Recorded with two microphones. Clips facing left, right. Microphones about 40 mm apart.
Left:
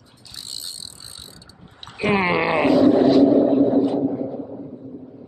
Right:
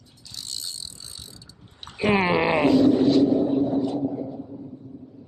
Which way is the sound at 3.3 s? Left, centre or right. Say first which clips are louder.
Left 6 dB; left.